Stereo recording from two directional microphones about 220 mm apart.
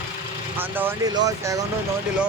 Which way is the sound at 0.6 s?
10° right (ahead or behind).